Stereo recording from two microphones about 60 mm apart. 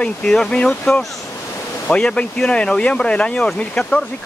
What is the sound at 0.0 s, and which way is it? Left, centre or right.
Speech, centre.